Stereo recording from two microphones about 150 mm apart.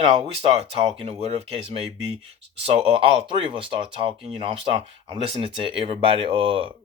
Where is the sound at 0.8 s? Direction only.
40° right (ahead or behind).